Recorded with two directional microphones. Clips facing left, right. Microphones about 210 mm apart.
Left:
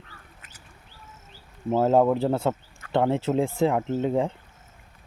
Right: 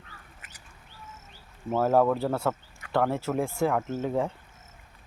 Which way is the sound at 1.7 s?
20° left (ahead or behind).